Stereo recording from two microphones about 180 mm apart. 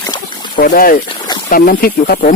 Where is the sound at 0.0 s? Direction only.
25° left (ahead or behind).